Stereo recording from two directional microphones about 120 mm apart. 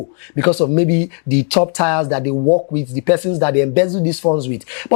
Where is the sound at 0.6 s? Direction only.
15° left (ahead or behind).